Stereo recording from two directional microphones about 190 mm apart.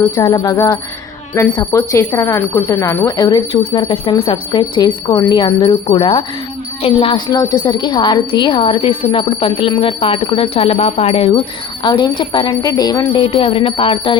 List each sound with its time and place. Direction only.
0.2 s speech: 20° left (ahead or behind)